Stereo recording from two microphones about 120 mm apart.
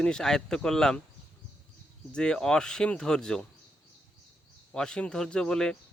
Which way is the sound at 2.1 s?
5° left (ahead or behind).